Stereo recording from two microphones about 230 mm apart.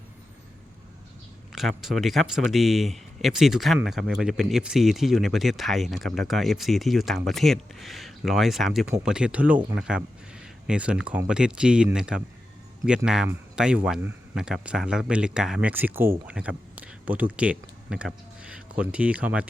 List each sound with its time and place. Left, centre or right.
1.5 s speech: centre